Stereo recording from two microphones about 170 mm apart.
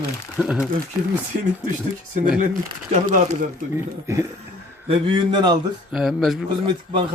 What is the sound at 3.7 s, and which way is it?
Speech, 15° right (ahead or behind).